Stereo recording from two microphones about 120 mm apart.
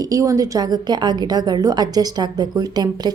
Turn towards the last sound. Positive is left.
turn(degrees=-35)  # may be behind; listen again after turning